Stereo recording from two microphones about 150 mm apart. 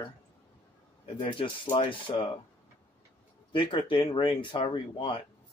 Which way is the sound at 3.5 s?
35° left (ahead or behind).